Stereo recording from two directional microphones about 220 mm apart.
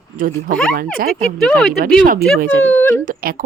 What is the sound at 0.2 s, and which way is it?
Speech, 40° right (ahead or behind).